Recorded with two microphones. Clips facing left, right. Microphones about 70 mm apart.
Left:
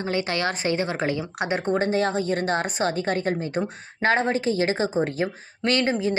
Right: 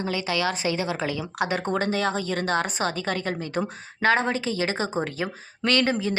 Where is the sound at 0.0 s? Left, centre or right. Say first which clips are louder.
Left 1 dB; left.